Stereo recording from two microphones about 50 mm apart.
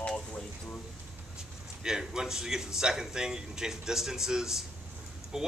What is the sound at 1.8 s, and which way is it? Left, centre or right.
Speech, centre.